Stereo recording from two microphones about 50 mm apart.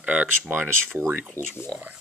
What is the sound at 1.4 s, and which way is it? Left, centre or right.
Speech, right.